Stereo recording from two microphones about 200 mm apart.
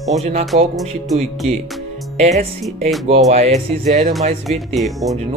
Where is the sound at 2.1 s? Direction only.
35° right (ahead or behind).